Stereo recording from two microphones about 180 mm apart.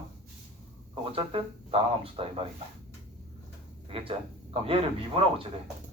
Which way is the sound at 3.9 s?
30° right (ahead or behind).